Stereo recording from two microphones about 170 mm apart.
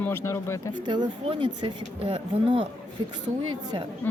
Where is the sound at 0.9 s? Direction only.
25° right (ahead or behind).